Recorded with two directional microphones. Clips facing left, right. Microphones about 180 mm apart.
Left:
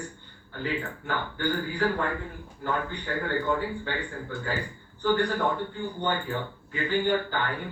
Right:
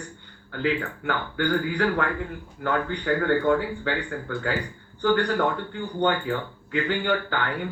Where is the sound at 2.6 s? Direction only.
70° right (ahead or behind).